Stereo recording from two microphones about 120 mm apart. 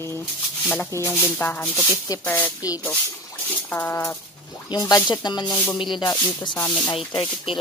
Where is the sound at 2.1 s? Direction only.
30° left (ahead or behind).